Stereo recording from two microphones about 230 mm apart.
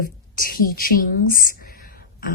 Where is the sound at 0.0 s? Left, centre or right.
Left.